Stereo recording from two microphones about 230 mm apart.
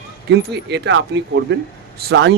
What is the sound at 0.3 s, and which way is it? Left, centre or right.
Speech, right.